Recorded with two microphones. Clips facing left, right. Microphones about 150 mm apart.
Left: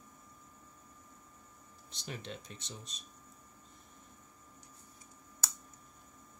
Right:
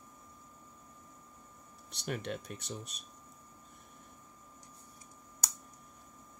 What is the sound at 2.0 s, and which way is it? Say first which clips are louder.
Speech: right 7 dB; 65° right (ahead or behind).